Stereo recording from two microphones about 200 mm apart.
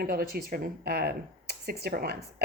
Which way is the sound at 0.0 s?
50° right (ahead or behind).